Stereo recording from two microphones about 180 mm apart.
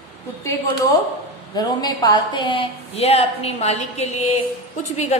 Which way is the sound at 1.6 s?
25° left (ahead or behind).